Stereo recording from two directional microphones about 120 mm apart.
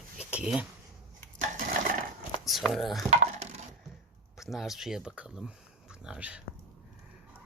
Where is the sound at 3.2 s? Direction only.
65° right (ahead or behind).